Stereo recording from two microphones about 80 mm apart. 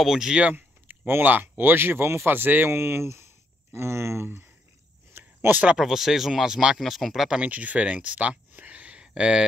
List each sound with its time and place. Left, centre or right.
0.0 s speech: centre; by 4.5 s right
5.1 s a sound: right
5.8 s speech: centre
7.3 s speech: centre